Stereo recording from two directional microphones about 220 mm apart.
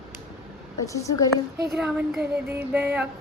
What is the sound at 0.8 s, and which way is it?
Speech, 15° left (ahead or behind).